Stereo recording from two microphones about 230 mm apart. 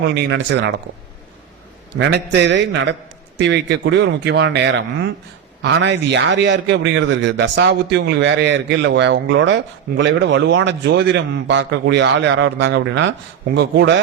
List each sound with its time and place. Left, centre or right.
0.0 s a man's voice: right
2.0 s a man's voice: right